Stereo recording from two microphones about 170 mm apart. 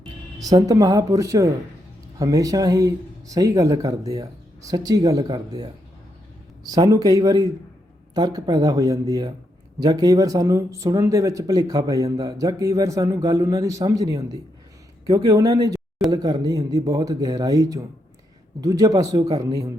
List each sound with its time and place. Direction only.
0.3 s speech: 20° right (ahead or behind)
6.7 s speech: 20° right (ahead or behind)